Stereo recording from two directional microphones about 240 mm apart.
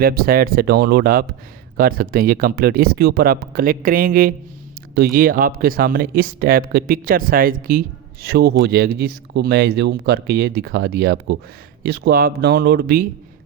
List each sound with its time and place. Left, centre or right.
0.0 s speech: right